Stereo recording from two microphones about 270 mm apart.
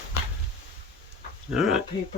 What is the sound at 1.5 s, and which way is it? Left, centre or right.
Speech, centre.